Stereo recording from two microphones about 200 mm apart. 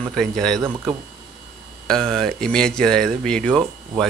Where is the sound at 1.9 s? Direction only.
Centre (ahead or behind).